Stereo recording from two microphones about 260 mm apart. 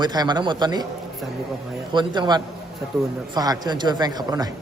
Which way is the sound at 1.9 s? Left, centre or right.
Centre.